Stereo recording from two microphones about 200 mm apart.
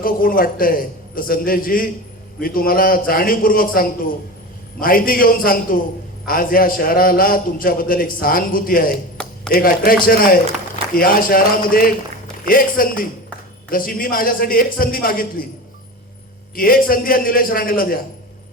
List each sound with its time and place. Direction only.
0.0 s a man's voice: 45° left (ahead or behind)
16.6 s a man's voice: 45° left (ahead or behind)